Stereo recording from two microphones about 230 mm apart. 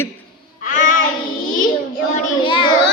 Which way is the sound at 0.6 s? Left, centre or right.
Left.